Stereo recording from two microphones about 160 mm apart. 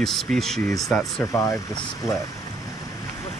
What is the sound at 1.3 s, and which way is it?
Speech, 20° left (ahead or behind).